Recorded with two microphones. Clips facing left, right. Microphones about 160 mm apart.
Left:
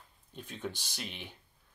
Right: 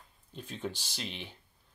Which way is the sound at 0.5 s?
10° right (ahead or behind).